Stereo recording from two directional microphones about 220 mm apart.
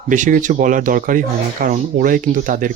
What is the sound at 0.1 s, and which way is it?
Speech, 35° right (ahead or behind).